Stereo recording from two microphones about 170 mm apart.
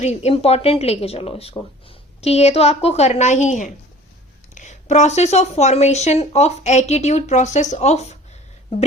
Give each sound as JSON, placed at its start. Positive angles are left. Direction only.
{"t": 0.0, "sound": "a woman's voice", "side_deg": 40}